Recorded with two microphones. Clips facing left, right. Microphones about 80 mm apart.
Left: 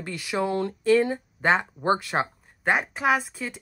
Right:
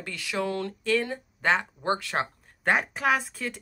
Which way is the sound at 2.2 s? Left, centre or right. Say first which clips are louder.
Left 1 dB; centre.